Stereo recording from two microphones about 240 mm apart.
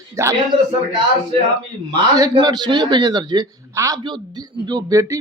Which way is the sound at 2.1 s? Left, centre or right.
Centre.